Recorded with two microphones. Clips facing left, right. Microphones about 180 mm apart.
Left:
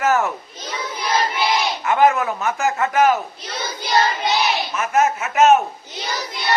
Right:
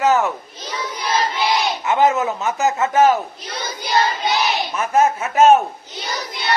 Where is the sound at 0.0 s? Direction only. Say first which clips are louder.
Right 2 dB; 20° right (ahead or behind).